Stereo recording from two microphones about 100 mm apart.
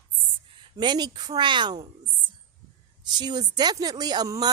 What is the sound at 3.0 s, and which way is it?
A woman's voice, 45° right (ahead or behind).